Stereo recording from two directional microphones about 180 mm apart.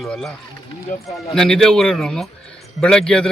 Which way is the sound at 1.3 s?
5° left (ahead or behind).